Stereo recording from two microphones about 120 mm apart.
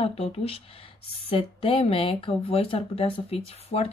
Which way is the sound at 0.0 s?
55° left (ahead or behind).